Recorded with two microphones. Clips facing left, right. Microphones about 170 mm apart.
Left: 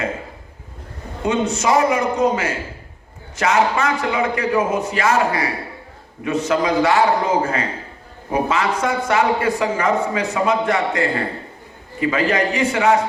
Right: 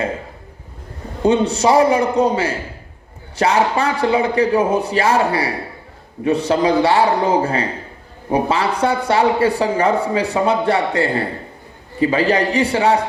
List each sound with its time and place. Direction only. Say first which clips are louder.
1.2 s a man's voice: right 5 dB; 30° right (ahead or behind)